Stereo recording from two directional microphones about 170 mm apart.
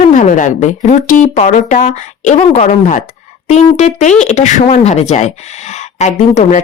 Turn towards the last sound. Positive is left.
turn(degrees=45)  # may be behind; listen again after turning